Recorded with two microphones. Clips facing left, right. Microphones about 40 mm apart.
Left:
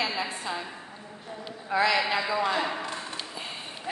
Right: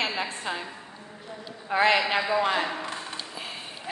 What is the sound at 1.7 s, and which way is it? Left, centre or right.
Speech, right.